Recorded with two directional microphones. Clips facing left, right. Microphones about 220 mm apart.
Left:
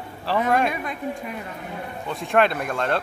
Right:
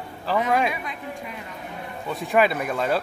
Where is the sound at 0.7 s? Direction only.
45° left (ahead or behind).